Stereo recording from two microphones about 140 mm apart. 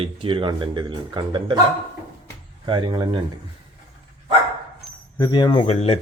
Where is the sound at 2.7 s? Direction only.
30° right (ahead or behind).